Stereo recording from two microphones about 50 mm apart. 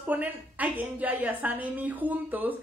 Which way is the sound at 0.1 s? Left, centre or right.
Right.